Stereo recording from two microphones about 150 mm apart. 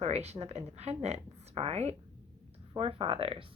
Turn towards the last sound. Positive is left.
turn(degrees=-40)  # may be behind; listen again after turning